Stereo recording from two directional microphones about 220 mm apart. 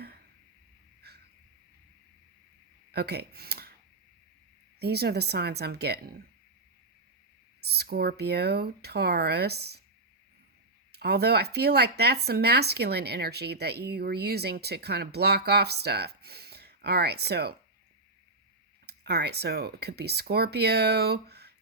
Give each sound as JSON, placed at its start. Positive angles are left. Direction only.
{"t": 1.0, "sound": "a sound", "side_deg": -45}
{"t": 2.9, "sound": "speech", "side_deg": -45}
{"t": 4.8, "sound": "speech", "side_deg": -45}
{"t": 7.6, "sound": "speech", "side_deg": -45}
{"t": 10.9, "sound": "speech", "side_deg": -45}
{"t": 18.9, "sound": "speech", "side_deg": -50}